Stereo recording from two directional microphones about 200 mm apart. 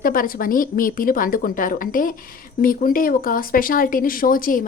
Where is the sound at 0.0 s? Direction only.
45° left (ahead or behind).